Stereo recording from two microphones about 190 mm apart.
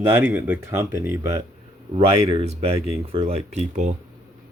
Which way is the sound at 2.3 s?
30° right (ahead or behind).